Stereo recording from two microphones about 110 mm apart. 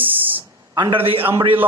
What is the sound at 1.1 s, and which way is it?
Speech, 55° right (ahead or behind).